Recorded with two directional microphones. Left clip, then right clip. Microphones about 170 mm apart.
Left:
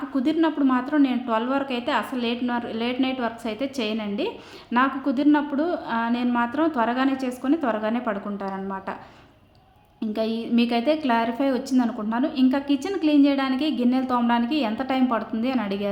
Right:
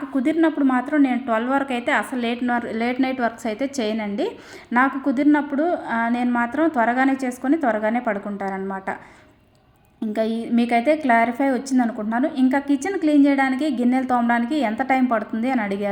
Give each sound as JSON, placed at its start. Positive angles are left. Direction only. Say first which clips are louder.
{"t": 0.2, "sound": "a woman's voice", "louder": "right 3 dB", "side_deg": -10}
{"t": 10.1, "sound": "a woman's voice", "louder": "right 3 dB", "side_deg": -15}